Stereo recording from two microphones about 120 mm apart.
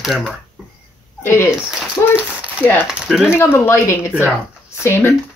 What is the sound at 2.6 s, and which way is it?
Speech, 15° left (ahead or behind).